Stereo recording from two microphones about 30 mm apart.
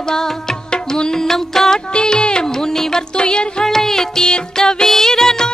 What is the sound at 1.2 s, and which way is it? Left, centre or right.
Music, centre.